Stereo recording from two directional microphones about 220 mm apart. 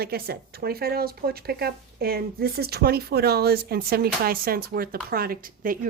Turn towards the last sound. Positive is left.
turn(degrees=-40)  # may be behind; listen again after turning